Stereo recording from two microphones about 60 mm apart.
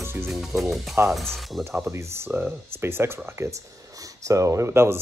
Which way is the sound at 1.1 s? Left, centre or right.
Centre.